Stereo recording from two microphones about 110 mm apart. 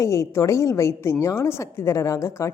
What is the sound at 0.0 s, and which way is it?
A woman's voice, 25° left (ahead or behind).